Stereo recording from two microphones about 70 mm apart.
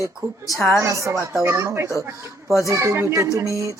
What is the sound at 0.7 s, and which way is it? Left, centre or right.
A woman's voice, right.